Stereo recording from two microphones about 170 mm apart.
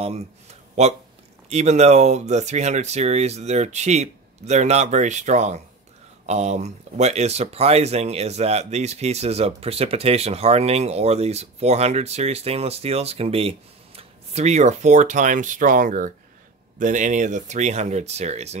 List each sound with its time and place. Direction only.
0.8 s speech: 40° right (ahead or behind)